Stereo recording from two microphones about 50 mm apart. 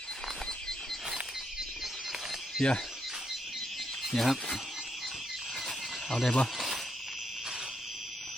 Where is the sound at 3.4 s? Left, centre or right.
Centre.